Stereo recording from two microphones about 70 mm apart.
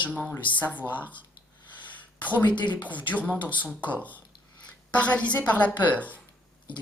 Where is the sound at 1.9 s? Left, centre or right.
Left.